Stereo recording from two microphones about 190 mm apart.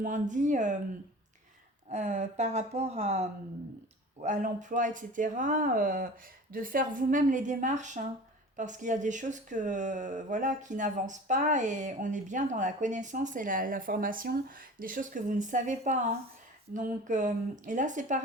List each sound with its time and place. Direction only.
0.0 s speech: 40° right (ahead or behind)
1.9 s speech: 35° right (ahead or behind)